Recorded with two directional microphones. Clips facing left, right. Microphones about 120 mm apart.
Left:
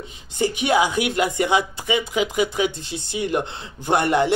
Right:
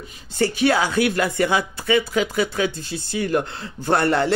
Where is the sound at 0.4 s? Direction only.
20° left (ahead or behind).